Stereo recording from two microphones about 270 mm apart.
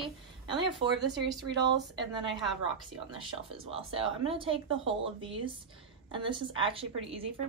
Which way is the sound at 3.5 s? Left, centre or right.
Right.